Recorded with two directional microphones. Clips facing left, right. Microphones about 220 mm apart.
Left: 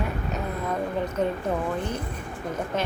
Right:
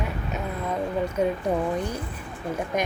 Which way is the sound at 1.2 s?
10° right (ahead or behind).